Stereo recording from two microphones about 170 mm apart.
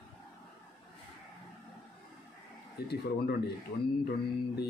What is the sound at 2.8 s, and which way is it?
Speech, 65° left (ahead or behind).